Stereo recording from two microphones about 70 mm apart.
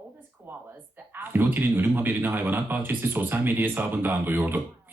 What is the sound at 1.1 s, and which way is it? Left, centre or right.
A man's voice, right.